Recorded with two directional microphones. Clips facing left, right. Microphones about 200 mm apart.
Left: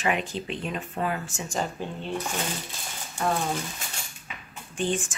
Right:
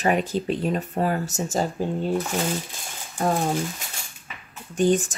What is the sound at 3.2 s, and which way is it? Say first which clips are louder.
Speech: right 4 dB; 35° right (ahead or behind).